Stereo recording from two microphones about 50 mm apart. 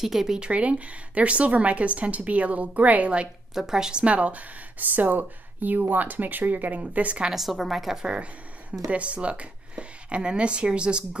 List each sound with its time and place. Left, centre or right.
0.0 s speech: centre
0.4 s a woman's voice: right
3.5 s speech: centre
4.0 s speech: right
7.2 s a woman's voice: centre
8.0 s a woman's voice: centre